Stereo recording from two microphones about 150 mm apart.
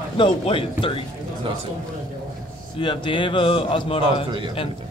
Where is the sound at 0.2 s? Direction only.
35° left (ahead or behind).